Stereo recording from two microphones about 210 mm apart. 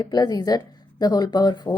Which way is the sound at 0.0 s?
20° left (ahead or behind).